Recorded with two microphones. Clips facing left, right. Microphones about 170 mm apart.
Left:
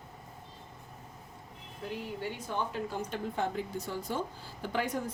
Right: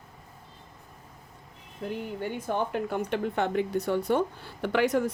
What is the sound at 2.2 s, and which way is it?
Speech, 55° right (ahead or behind).